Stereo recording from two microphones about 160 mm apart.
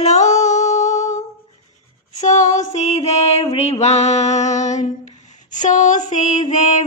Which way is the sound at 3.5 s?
40° left (ahead or behind).